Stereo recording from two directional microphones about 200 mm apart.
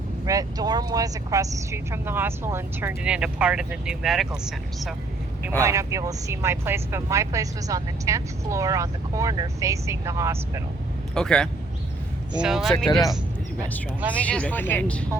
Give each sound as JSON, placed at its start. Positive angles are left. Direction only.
{"t": 0.3, "sound": "speech", "side_deg": -20}
{"t": 5.5, "sound": "speech", "side_deg": -15}
{"t": 11.1, "sound": "a man's voice", "side_deg": 5}
{"t": 12.7, "sound": "speech", "side_deg": 15}
{"t": 14.3, "sound": "speech", "side_deg": 5}